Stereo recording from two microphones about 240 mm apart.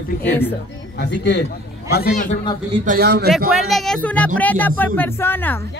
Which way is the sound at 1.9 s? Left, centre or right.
Left.